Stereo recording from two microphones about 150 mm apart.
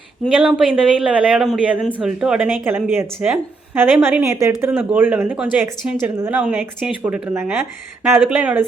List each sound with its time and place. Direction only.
0.3 s speech: 5° right (ahead or behind); by 4.5 s 20° right (ahead or behind)
4.7 s speech: 10° right (ahead or behind)